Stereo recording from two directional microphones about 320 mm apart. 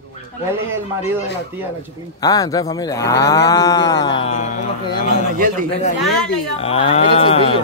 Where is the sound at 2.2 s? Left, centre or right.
Centre.